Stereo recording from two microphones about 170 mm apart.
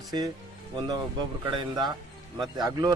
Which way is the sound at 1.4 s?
25° right (ahead or behind).